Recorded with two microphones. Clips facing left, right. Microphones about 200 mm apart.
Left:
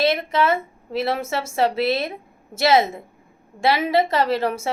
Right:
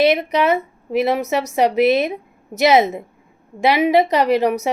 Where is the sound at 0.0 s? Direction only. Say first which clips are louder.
Right 4 dB; 20° right (ahead or behind).